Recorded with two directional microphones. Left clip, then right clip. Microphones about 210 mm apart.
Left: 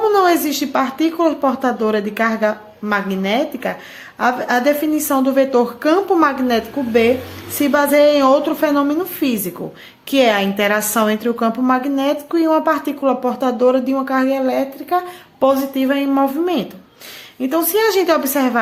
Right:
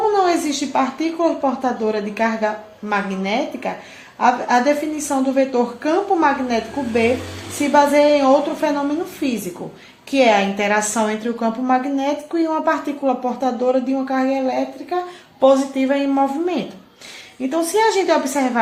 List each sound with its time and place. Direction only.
0.0 s a woman's voice: 45° left (ahead or behind)